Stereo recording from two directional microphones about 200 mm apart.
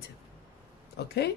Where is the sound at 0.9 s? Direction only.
55° left (ahead or behind).